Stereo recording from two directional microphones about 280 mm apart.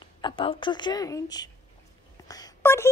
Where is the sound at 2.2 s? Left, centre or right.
Centre.